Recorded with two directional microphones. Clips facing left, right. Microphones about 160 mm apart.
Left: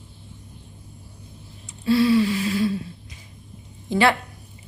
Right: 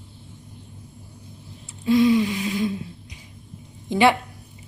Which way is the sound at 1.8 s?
15° right (ahead or behind).